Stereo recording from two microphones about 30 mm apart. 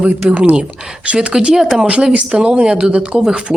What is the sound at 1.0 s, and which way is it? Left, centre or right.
Speech, right.